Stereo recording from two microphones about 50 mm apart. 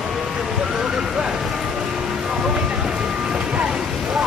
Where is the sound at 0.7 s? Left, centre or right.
Centre.